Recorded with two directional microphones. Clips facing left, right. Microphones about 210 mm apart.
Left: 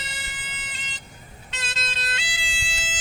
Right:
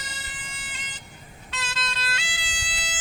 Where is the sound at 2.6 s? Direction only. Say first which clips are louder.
Left 1 dB; 25° left (ahead or behind).